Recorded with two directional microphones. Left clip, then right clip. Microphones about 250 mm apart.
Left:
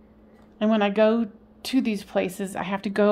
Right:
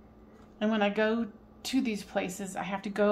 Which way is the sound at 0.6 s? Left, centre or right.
Left.